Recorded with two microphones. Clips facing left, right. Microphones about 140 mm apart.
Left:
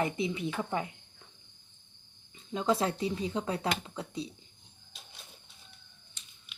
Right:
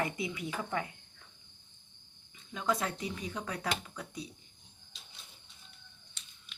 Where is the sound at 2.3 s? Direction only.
30° left (ahead or behind).